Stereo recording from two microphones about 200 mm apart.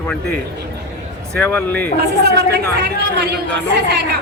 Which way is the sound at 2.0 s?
55° right (ahead or behind).